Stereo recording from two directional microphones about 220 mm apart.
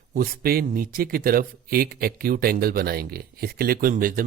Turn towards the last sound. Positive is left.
turn(degrees=-40)  # may be behind; listen again after turning